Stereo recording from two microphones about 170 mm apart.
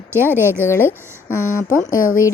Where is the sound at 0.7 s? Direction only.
15° left (ahead or behind).